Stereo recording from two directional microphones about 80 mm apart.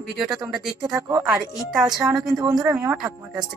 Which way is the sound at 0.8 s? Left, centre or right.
Right.